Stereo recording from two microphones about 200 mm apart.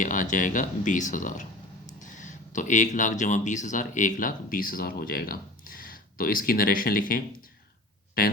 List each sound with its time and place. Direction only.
0.0 s speech: 40° left (ahead or behind)